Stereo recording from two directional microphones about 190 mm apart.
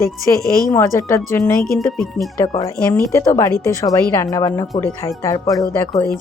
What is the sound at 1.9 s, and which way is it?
Speech, centre (ahead or behind).